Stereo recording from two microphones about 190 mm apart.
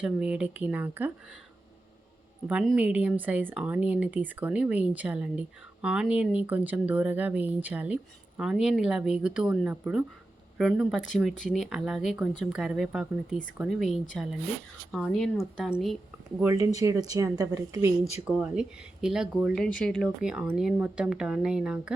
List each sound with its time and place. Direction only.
0.0 s speech: 5° right (ahead or behind)
2.5 s speech: 5° right (ahead or behind)
16.4 s speech: 15° right (ahead or behind)
18.3 s speech: 5° right (ahead or behind)